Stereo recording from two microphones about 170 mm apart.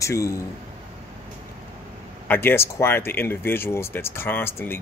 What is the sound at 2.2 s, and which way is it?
Speech, 15° left (ahead or behind).